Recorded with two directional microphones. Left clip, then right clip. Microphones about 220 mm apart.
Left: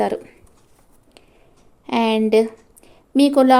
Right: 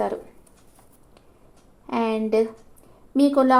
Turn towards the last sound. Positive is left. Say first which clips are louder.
# left 4 dB
turn(degrees=40)  # may be behind; listen again after turning